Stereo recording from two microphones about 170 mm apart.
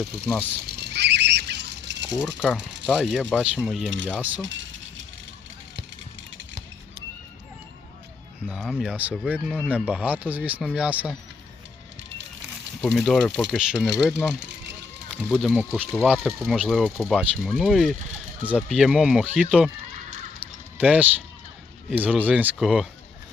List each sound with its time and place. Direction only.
0.3 s speech: 10° right (ahead or behind)
0.8 s squawk: 80° right
2.4 s speech: 5° left (ahead or behind)
3.8 s speech: 90° right
4.1 s speech: 10° right (ahead or behind)
8.4 s speech: centre (ahead or behind)
12.8 s speech: centre (ahead or behind)
15.2 s speech: centre (ahead or behind)
20.4 s a sound: 10° right (ahead or behind)
20.7 s speech: 10° right (ahead or behind)